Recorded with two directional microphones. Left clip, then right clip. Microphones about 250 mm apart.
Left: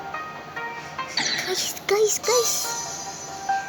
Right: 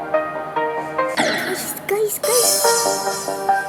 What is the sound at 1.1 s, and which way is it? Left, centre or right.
Music, right.